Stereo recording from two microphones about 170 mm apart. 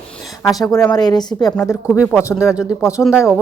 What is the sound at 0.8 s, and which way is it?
A woman's voice, 25° left (ahead or behind).